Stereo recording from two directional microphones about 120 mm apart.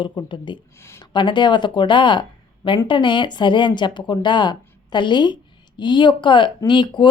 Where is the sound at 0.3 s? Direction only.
40° left (ahead or behind).